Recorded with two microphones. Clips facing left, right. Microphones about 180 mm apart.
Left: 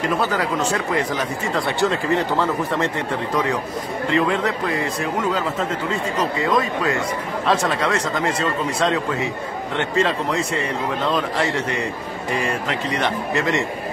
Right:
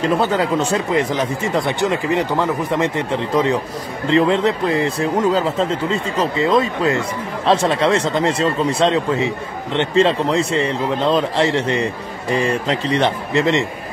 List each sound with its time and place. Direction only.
0.0 s speech: 25° right (ahead or behind)
4.1 s speech: 25° right (ahead or behind)